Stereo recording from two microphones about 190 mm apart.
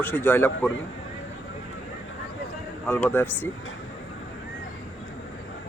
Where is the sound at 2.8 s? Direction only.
10° left (ahead or behind).